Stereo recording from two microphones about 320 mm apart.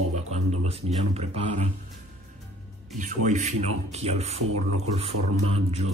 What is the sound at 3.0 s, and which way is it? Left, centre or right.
Speech, right.